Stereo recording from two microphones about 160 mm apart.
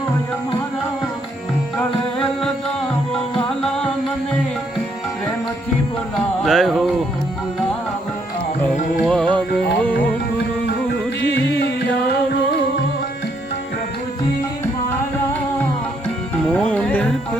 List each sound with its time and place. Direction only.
6.4 s music: centre (ahead or behind)
9.0 s music: 5° left (ahead or behind)
10.8 s music: 90° left
16.4 s music: 5° left (ahead or behind)